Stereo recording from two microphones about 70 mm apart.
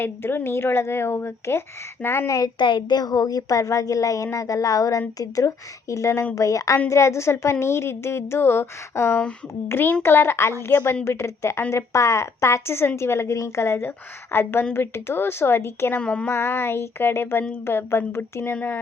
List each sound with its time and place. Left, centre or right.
0.0 s a woman's voice: left
2.6 s a woman's voice: left
16.0 s speech: centre
16.3 s a woman's voice: left
18.5 s speech: left